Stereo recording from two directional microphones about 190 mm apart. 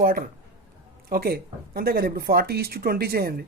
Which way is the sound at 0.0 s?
50° right (ahead or behind).